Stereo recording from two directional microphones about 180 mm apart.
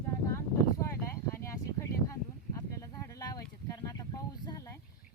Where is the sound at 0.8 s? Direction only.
15° left (ahead or behind).